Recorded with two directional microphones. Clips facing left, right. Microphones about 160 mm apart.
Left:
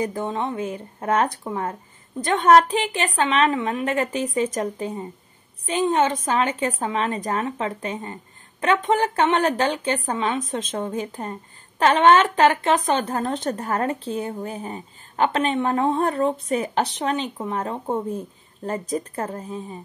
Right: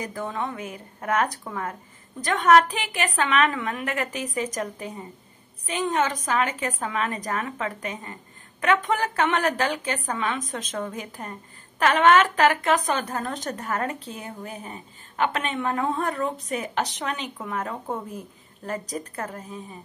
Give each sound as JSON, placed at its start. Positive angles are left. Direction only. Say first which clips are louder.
{"t": 0.0, "sound": "a woman's voice", "louder": "left 5 dB", "side_deg": 25}